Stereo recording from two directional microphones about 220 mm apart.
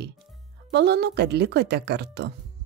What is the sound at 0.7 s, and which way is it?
Speech, 50° right (ahead or behind).